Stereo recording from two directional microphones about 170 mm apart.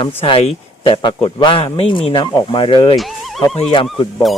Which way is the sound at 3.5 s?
30° left (ahead or behind).